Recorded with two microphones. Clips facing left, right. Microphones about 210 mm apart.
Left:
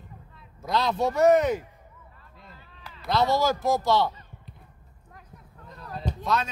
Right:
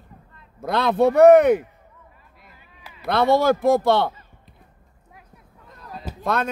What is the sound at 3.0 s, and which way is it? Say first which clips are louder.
A man's voice: right 6 dB; 60° right (ahead or behind).